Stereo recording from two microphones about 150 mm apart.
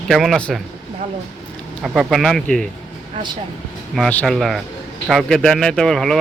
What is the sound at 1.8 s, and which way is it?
Speech, 5° right (ahead or behind).